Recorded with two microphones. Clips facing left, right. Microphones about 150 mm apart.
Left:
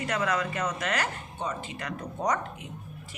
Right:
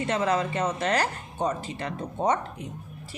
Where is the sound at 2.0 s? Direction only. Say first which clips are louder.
Right 3 dB; 25° right (ahead or behind).